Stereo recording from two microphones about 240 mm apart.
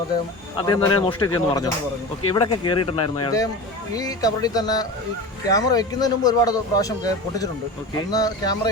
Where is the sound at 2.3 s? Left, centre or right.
Centre.